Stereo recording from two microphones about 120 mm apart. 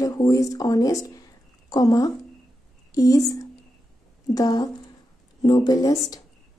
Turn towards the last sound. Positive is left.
turn(degrees=30)  # may be behind; listen again after turning